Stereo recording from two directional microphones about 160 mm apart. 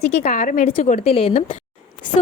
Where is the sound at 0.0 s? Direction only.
50° left (ahead or behind).